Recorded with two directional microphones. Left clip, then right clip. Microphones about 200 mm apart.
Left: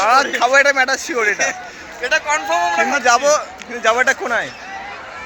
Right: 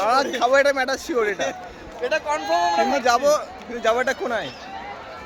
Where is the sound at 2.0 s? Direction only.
25° right (ahead or behind).